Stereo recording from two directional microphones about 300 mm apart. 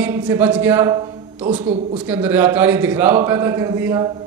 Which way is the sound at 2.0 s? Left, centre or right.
Centre.